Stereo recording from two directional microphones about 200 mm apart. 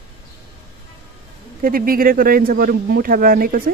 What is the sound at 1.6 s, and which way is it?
Speech, 45° right (ahead or behind).